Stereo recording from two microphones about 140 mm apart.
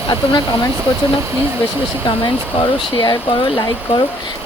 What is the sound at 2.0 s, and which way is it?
Speech, 35° left (ahead or behind).